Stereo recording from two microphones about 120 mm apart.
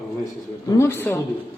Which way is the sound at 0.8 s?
20° left (ahead or behind).